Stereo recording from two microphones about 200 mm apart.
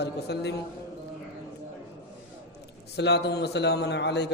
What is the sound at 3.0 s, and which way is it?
A man's voice, 55° left (ahead or behind).